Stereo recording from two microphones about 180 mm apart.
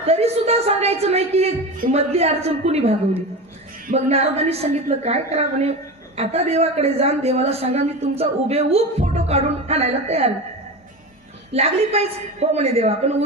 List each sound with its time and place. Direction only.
0.0 s a woman's voice: 35° right (ahead or behind)
3.9 s a woman's voice: 35° right (ahead or behind)
11.5 s a woman's voice: 35° right (ahead or behind)